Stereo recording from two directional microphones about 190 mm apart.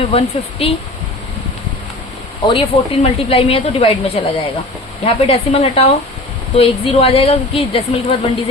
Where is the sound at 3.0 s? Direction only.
30° left (ahead or behind).